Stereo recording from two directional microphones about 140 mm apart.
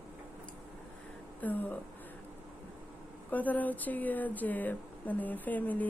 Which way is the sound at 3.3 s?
10° left (ahead or behind).